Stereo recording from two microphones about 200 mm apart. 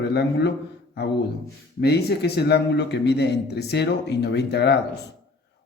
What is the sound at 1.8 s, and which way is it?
A man's voice, 55° left (ahead or behind).